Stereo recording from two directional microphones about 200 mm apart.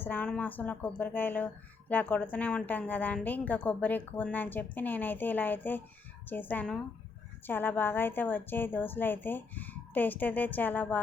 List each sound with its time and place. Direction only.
0.0 s a woman's voice: 10° left (ahead or behind)